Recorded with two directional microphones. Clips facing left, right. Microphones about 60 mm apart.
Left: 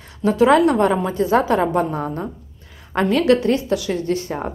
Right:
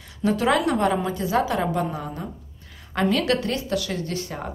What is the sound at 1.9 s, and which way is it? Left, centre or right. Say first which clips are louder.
Speech: left 7 dB; left.